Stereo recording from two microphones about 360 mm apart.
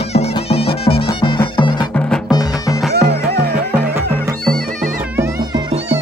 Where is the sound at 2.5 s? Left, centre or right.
Centre.